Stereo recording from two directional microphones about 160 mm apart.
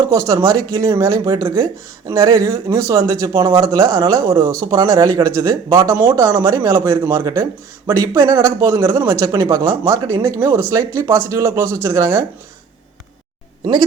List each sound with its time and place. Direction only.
0.1 s speech: 20° right (ahead or behind)